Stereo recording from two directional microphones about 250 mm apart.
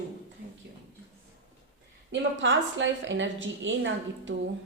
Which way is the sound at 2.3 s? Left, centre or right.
Right.